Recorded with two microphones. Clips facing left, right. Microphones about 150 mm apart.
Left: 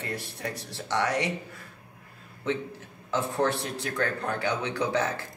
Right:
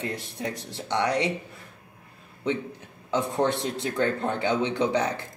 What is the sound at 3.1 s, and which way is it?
Speech, 20° right (ahead or behind).